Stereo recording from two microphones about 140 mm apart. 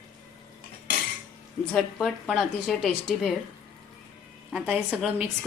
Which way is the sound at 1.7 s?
Centre (ahead or behind).